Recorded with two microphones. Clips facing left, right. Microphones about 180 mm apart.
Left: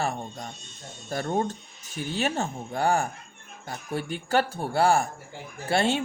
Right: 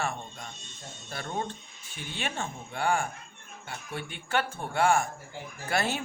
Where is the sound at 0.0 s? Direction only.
35° left (ahead or behind).